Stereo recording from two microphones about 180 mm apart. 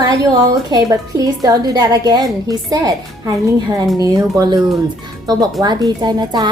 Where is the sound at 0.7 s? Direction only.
20° right (ahead or behind).